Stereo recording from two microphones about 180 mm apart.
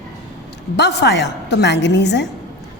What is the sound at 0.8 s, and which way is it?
A woman's voice, 70° left (ahead or behind).